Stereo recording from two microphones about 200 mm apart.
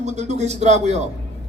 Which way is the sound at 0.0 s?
35° right (ahead or behind).